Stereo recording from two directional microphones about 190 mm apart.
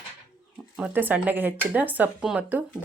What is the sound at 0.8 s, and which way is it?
Speech, 10° right (ahead or behind).